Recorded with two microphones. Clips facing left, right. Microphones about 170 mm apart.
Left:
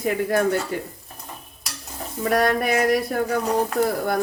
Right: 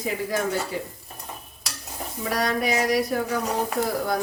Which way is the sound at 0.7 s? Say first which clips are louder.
Left 2 dB; 55° left (ahead or behind).